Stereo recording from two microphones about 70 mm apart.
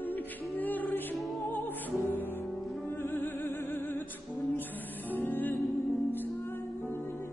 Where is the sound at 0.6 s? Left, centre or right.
Left.